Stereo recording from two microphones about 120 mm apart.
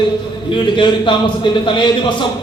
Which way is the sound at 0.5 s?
40° left (ahead or behind).